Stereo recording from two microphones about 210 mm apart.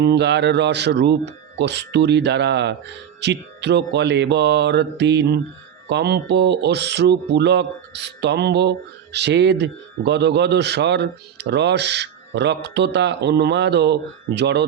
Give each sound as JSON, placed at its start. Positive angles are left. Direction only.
{"t": 0.0, "sound": "a man's voice", "side_deg": -55}